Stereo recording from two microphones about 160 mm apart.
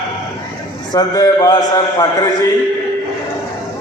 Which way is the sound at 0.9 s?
20° left (ahead or behind).